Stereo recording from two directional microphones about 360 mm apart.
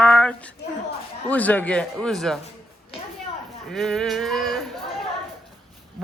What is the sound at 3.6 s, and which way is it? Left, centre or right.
Speech, centre.